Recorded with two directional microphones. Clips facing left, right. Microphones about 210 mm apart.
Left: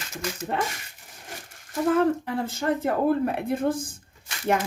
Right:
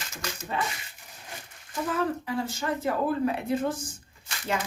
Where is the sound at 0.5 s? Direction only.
60° left (ahead or behind).